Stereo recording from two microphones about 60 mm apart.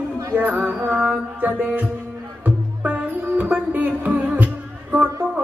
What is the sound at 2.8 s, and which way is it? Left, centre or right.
Music, right.